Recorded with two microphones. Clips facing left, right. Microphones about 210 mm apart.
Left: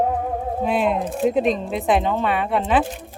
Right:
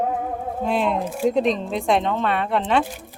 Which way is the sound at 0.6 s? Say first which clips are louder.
Left 1 dB; 5° left (ahead or behind).